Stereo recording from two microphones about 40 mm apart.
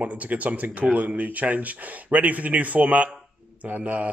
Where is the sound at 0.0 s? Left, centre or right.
Right.